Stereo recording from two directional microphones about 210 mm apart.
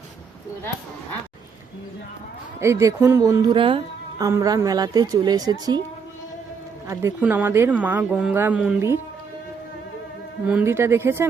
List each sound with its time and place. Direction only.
2.6 s speech: 15° right (ahead or behind)
6.8 s speech: 15° right (ahead or behind)
10.4 s speech: 5° right (ahead or behind)